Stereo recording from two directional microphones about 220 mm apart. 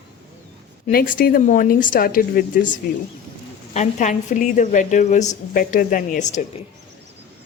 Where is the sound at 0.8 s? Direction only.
40° left (ahead or behind).